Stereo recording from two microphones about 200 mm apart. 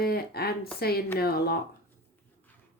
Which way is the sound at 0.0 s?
50° left (ahead or behind).